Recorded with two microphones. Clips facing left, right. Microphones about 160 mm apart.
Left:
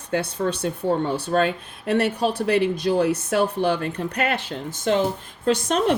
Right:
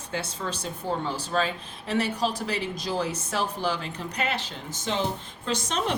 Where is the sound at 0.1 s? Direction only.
60° left (ahead or behind).